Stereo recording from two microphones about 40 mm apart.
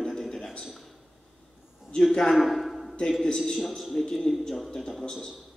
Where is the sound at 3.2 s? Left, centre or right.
Centre.